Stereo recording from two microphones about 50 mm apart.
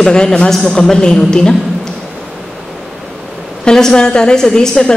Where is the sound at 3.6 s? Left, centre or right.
Centre.